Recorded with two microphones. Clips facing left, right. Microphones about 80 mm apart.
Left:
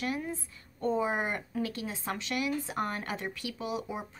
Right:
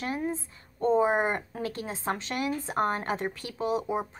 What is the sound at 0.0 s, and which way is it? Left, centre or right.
Speech, right.